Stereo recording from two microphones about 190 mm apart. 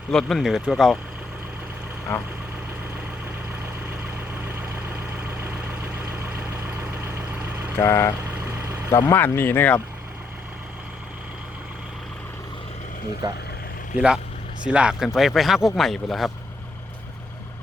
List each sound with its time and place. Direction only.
0.1 s speech: centre (ahead or behind)
5.1 s vehicle: 10° right (ahead or behind)
7.8 s speech: 15° left (ahead or behind)
8.3 s vehicle: 10° right (ahead or behind)
8.9 s speech: 15° left (ahead or behind)
13.2 s speech: 25° right (ahead or behind)
13.9 s speech: 5° right (ahead or behind)